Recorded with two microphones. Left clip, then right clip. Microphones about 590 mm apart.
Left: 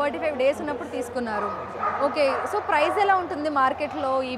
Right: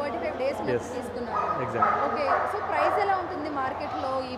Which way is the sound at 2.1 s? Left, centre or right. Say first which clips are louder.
Left 2 dB; left.